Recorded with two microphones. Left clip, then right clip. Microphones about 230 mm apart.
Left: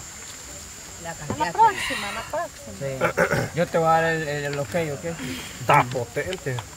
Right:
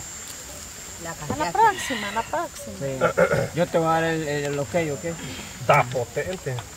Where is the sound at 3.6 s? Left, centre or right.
Centre.